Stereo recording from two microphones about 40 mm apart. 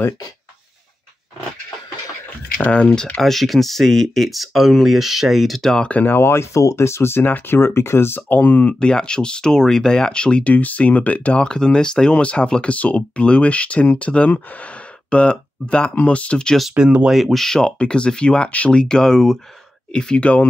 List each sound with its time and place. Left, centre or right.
2.7 s speech: left
3.2 s speech: centre
5.9 s speech: left
6.1 s speech: left
8.3 s speech: left
8.7 s speech: left
10.5 s speech: left
11.3 s speech: left
16.8 s speech: right
17.1 s speech: centre
17.4 s speech: centre
17.7 s speech: left